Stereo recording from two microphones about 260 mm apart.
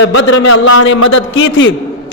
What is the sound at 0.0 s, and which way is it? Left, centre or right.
A man's voice, left.